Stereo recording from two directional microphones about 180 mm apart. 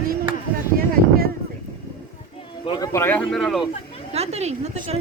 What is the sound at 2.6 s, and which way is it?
Speech, 20° left (ahead or behind).